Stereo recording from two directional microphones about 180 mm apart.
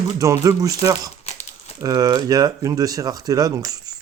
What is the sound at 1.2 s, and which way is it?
Crumpling, 35° left (ahead or behind).